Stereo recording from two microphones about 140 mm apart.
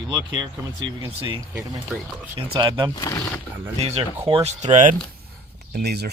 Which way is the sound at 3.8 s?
50° right (ahead or behind).